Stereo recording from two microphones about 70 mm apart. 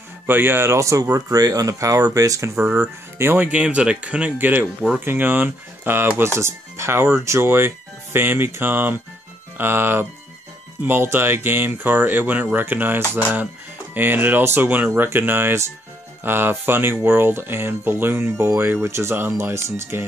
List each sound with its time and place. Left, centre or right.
0.3 s speech: right
1.1 s speech: right
2.6 s speech: right
3.3 s speech: right